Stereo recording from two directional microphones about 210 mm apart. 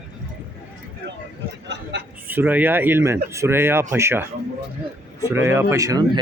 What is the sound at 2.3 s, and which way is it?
Speech, 10° right (ahead or behind).